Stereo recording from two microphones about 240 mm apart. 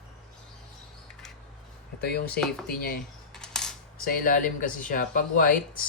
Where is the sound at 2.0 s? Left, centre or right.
Left.